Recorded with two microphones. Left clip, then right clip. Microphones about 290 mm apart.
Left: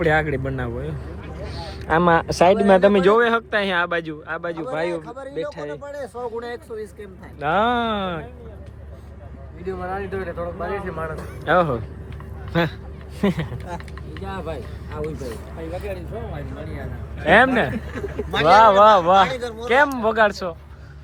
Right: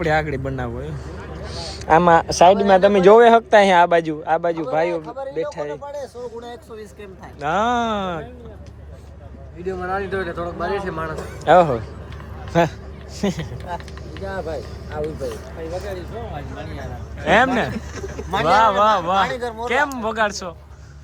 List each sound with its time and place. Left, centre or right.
0.0 s a man's voice: centre
5.1 s speech: left
7.3 s speech: centre
9.6 s a man's voice: right
11.4 s speech: centre
14.3 s speech: centre
16.6 s speech: centre
17.2 s speech: centre
18.3 s speech: right
18.8 s speech: centre
19.2 s speech: right
19.6 s speech: centre